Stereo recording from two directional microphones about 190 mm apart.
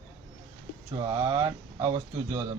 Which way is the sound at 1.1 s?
20° right (ahead or behind).